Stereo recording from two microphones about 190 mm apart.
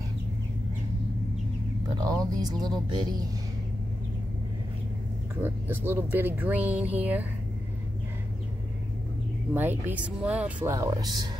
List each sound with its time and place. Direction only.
2.0 s speech: 20° right (ahead or behind)
5.3 s speech: 10° right (ahead or behind)
9.5 s speech: 10° right (ahead or behind)